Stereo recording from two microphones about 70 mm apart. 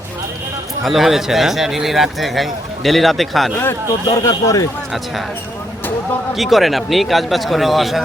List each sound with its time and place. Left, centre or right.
0.9 s speech: centre
4.0 s a man's voice: left
6.3 s speech: centre